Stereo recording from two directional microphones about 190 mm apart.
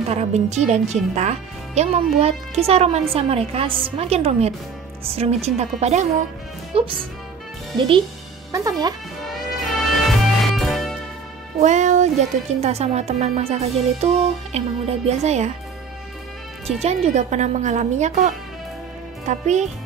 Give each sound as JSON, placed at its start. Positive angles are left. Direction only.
{"t": 0.1, "sound": "speech", "side_deg": -35}
{"t": 8.5, "sound": "speech", "side_deg": -15}
{"t": 9.2, "sound": "music", "side_deg": 0}
{"t": 11.6, "sound": "speech", "side_deg": -40}
{"t": 16.6, "sound": "speech", "side_deg": -35}